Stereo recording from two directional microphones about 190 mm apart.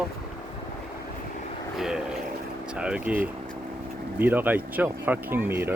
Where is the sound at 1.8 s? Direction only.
5° right (ahead or behind).